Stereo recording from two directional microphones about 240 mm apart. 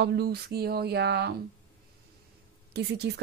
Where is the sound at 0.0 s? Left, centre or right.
Right.